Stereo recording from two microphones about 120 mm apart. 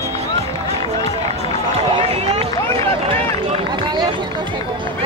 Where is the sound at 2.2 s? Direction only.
60° right (ahead or behind); by 4.0 s 40° right (ahead or behind).